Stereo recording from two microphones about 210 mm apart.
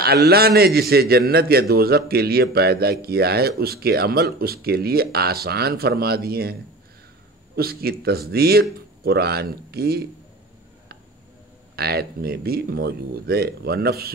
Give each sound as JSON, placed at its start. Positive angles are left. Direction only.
{"t": 0.0, "sound": "a man's voice", "side_deg": -50}
{"t": 7.5, "sound": "a man's voice", "side_deg": -45}
{"t": 11.7, "sound": "a man's voice", "side_deg": -50}